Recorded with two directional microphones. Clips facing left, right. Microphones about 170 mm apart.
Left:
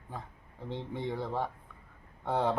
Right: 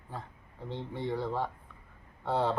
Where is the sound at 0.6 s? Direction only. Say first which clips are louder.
Even; 15° left (ahead or behind).